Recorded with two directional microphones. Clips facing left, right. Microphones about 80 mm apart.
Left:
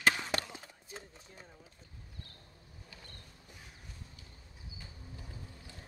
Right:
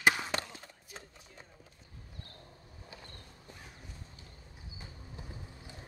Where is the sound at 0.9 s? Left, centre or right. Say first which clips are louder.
Left 2 dB; left.